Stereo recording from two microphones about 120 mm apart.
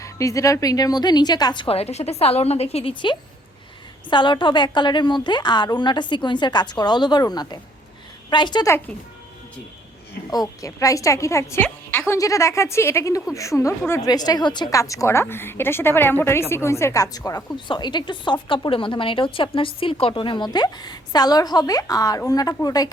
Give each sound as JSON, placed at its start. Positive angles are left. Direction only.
{"t": 0.0, "sound": "a woman's voice", "side_deg": 25}
{"t": 1.6, "sound": "a woman's voice", "side_deg": 55}
{"t": 2.9, "sound": "a woman's voice", "side_deg": 40}
{"t": 10.3, "sound": "a woman's voice", "side_deg": 30}